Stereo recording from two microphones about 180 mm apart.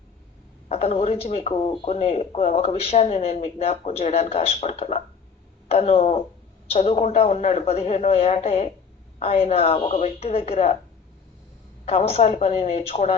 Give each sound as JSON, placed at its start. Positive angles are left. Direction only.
{"t": 0.7, "sound": "speech", "side_deg": 35}
{"t": 11.9, "sound": "speech", "side_deg": 35}